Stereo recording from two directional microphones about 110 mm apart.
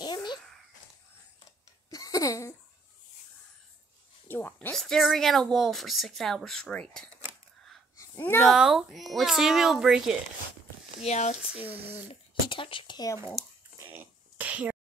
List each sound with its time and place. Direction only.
0.0 s babbling: 40° left (ahead or behind)
1.9 s a sound: 35° left (ahead or behind)
4.3 s a sound: 20° left (ahead or behind)
4.7 s speech: 5° left (ahead or behind)
8.2 s speech: 20° left (ahead or behind)
8.5 s speech: 5° right (ahead or behind)
11.1 s speech: 85° left
11.5 s speech: 15° right (ahead or behind)
12.1 s speech: 50° left (ahead or behind)
13.9 s sneeze: 10° right (ahead or behind)